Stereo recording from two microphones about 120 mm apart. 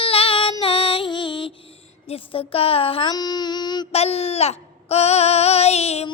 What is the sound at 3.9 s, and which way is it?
Child singing, 55° left (ahead or behind).